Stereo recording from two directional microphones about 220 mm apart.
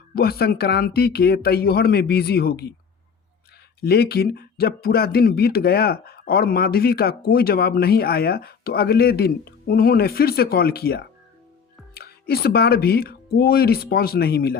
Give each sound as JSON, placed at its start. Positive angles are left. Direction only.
{"t": 0.1, "sound": "speech", "side_deg": 45}
{"t": 3.8, "sound": "speech", "side_deg": 45}